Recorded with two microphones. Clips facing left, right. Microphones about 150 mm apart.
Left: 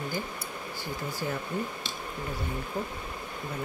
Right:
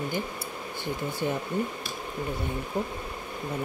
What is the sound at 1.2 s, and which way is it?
Speech, 20° right (ahead or behind).